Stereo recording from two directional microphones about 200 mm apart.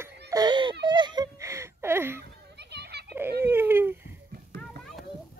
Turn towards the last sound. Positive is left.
turn(degrees=-10)  # may be behind; listen again after turning